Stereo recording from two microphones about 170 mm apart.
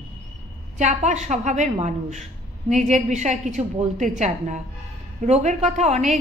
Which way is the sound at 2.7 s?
45° right (ahead or behind).